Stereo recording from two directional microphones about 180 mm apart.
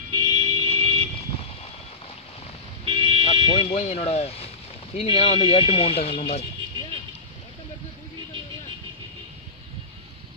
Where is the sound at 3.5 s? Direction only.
35° left (ahead or behind).